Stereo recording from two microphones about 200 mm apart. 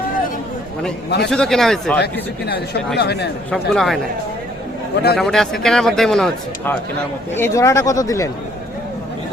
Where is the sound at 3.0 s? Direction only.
55° left (ahead or behind).